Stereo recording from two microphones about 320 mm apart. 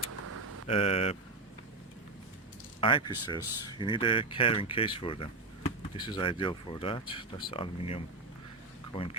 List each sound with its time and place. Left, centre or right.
0.1 s vehicle: right
0.7 s speech: centre
2.8 s speech: centre